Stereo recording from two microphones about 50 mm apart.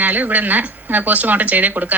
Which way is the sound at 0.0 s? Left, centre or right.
Right.